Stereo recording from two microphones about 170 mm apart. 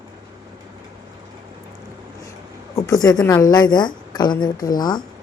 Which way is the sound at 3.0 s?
20° left (ahead or behind).